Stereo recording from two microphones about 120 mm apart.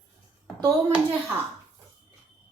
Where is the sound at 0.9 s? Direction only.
10° right (ahead or behind).